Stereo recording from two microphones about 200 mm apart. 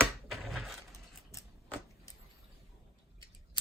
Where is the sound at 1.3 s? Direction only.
15° left (ahead or behind).